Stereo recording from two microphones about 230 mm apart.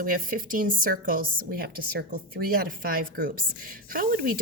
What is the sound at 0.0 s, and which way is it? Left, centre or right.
A woman's voice, right.